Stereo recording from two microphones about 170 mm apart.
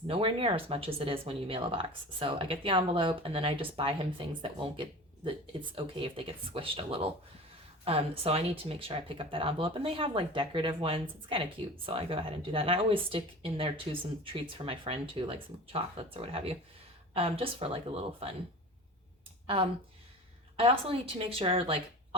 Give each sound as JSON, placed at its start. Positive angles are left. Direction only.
{"t": 0.1, "sound": "speech", "side_deg": -30}
{"t": 20.6, "sound": "speech", "side_deg": -35}